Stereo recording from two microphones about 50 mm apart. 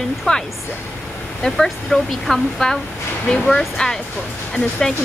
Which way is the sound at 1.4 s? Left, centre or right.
Centre.